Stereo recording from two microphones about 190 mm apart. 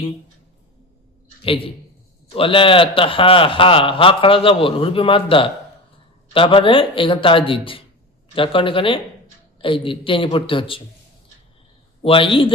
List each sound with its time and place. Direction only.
2.3 s a man's voice: 30° left (ahead or behind)
12.0 s a man's voice: 25° left (ahead or behind)